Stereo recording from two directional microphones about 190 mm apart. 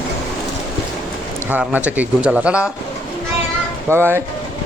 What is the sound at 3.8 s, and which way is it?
Speech, 10° right (ahead or behind).